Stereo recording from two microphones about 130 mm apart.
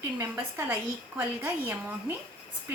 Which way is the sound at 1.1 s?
15° right (ahead or behind).